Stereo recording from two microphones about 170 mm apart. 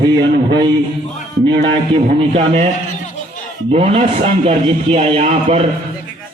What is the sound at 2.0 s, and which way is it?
Speech, 40° right (ahead or behind).